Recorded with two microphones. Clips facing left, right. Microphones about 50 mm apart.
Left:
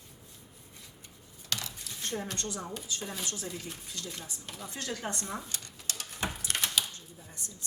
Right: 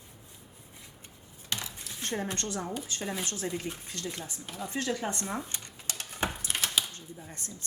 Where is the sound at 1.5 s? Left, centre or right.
Right.